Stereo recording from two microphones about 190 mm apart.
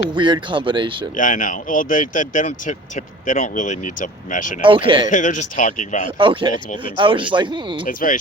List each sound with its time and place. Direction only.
0.1 s speech: 25° right (ahead or behind)
1.1 s speech: 45° left (ahead or behind)
4.6 s speech: 25° right (ahead or behind)
5.0 s speech: 40° left (ahead or behind)
6.1 s speech: 25° right (ahead or behind)
7.9 s speech: 45° left (ahead or behind)